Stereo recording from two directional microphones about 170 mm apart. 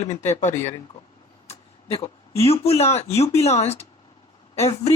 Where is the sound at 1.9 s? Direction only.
35° left (ahead or behind).